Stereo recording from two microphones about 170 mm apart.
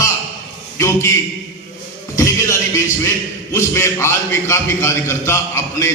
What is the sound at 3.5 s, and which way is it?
A man's voice, 15° left (ahead or behind).